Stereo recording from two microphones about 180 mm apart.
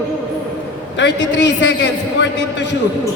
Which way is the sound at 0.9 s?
80° left.